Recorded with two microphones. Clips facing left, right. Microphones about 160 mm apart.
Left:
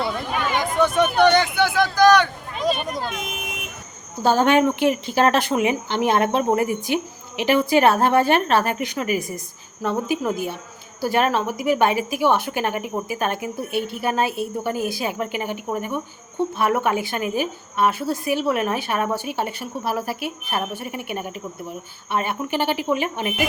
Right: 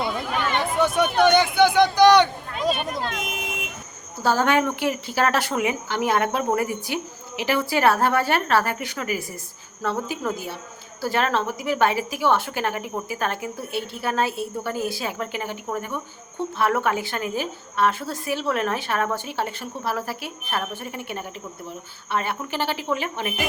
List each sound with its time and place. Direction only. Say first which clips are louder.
0.3 s chatter: left 1 dB; 10° left (ahead or behind)
0.7 s speech: left 3 dB; 10° right (ahead or behind)
2.6 s speech: left 1 dB; centre (ahead or behind)
4.2 s a woman's voice: left 4 dB; 20° left (ahead or behind)